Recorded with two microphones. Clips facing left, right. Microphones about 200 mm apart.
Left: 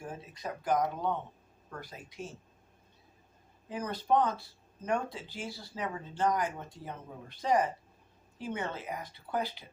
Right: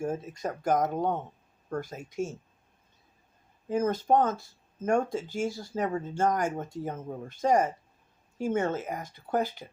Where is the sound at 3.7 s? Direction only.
45° right (ahead or behind).